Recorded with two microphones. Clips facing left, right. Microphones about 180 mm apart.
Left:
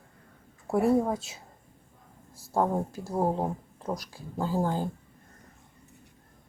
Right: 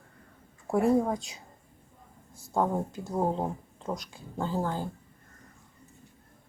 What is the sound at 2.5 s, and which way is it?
Speech, 5° left (ahead or behind).